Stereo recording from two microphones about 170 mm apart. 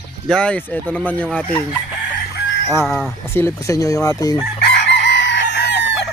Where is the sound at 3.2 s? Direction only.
15° left (ahead or behind).